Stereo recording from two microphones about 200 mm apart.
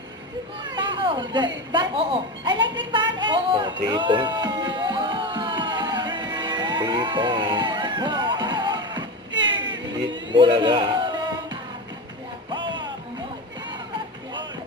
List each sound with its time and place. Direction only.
0.7 s chatter: 25° right (ahead or behind)
1.7 s speech: 25° right (ahead or behind)
6.3 s music: 20° right (ahead or behind)
9.3 s vehicle: 65° right (ahead or behind)
10.3 s speech: 25° right (ahead or behind)
12.5 s music: 25° right (ahead or behind)